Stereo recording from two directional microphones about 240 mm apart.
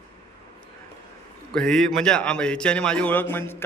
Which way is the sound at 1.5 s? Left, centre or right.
Centre.